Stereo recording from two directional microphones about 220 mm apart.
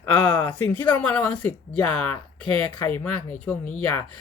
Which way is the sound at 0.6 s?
5° left (ahead or behind).